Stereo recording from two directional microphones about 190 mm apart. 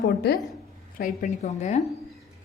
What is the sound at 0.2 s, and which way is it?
Speech, 55° left (ahead or behind).